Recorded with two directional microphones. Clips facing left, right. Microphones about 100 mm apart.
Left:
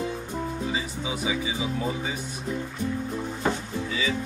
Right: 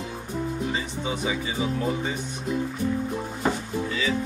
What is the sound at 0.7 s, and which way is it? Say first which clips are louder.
Speech: right 1 dB; 5° left (ahead or behind).